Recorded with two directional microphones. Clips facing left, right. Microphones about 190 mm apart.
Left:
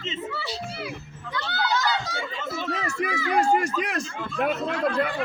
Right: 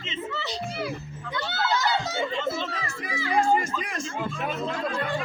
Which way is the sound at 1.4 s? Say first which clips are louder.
Even; 20° right (ahead or behind).